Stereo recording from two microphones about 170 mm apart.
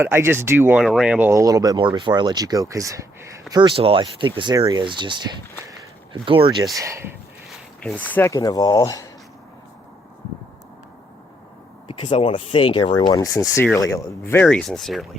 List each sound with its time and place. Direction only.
0.0 s speech: 15° right (ahead or behind)
1.3 s speech: 20° right (ahead or behind)
3.5 s speech: 30° right (ahead or behind)
6.7 s speech: 15° right (ahead or behind)
7.9 s speech: 10° left (ahead or behind)
11.9 s speech: 30° left (ahead or behind); by 15.0 s centre (ahead or behind)